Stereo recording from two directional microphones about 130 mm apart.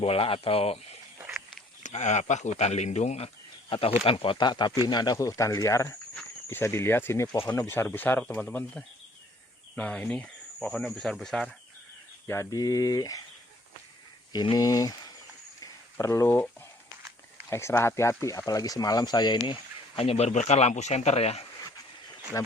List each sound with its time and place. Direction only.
0.0 s speech: 45° left (ahead or behind)
1.8 s speech: 65° left (ahead or behind)
3.7 s speech: 45° left (ahead or behind); by 11.5 s 5° left (ahead or behind)
12.3 s speech: 25° left (ahead or behind)
14.3 s speech: 35° left (ahead or behind)
15.6 s a sound: 20° left (ahead or behind)
17.5 s speech: 20° left (ahead or behind)
20.0 s speech: 50° left (ahead or behind)
22.3 s speech: 25° left (ahead or behind)